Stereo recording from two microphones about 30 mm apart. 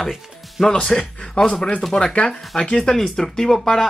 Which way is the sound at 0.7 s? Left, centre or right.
Left.